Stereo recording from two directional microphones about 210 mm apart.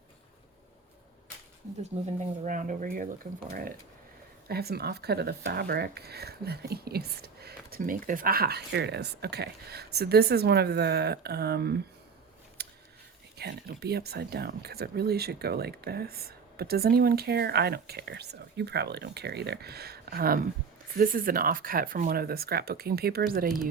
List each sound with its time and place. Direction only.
1.8 s speech: 35° right (ahead or behind)
4.4 s speech: 50° right (ahead or behind)
12.6 s scissors: 50° right (ahead or behind)
13.3 s speech: 50° right (ahead or behind)